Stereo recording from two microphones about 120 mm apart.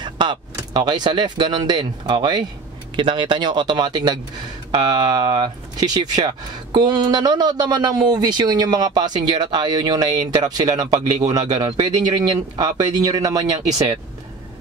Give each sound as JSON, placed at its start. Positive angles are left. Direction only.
{"t": 0.0, "sound": "speech", "side_deg": -40}